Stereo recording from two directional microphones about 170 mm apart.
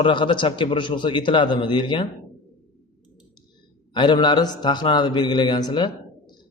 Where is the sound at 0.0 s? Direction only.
30° left (ahead or behind).